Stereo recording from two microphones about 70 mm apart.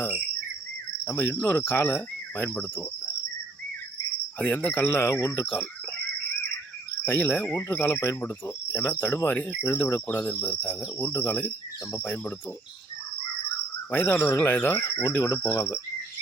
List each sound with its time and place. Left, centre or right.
1.0 s cricket: left
4.5 s cricket: left
7.0 s cricket: left
11.1 s cricket: left
13.9 s cricket: left
15.0 s cricket: left